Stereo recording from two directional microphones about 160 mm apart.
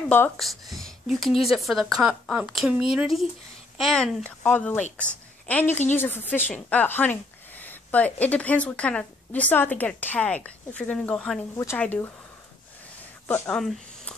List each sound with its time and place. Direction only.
0.4 s a woman's voice: centre (ahead or behind)
11.5 s a woman's voice: 15° left (ahead or behind)
13.3 s speech: 5° left (ahead or behind)